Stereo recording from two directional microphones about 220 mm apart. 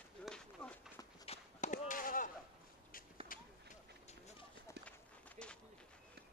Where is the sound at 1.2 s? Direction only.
30° left (ahead or behind).